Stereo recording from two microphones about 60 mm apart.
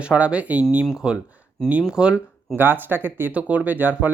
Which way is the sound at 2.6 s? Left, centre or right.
Right.